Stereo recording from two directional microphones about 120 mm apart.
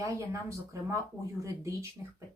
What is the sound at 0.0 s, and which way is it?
Speech, 25° right (ahead or behind).